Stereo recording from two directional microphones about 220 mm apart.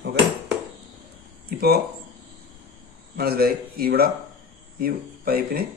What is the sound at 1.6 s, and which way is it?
Speech, 45° right (ahead or behind).